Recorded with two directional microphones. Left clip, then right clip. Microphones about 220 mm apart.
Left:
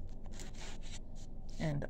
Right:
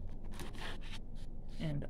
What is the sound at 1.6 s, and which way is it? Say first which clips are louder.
Speech: left 4 dB; 20° left (ahead or behind).